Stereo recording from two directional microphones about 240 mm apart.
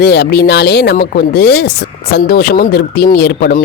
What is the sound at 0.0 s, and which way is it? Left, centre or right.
Speech, left.